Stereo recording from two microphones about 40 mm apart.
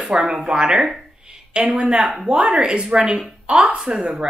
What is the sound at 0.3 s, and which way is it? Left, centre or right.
A woman's voice, centre.